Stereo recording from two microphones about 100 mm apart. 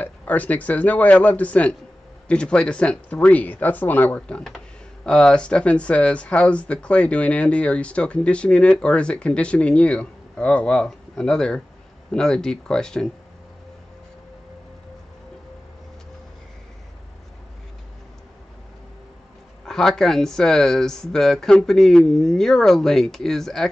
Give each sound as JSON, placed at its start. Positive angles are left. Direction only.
{"t": 0.0, "sound": "speech", "side_deg": 15}
{"t": 19.6, "sound": "speech", "side_deg": 5}